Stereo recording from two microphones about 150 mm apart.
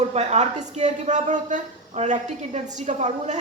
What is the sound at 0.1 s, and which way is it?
A woman's voice, 45° right (ahead or behind).